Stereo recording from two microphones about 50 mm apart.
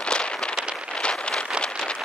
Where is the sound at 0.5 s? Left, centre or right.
Centre.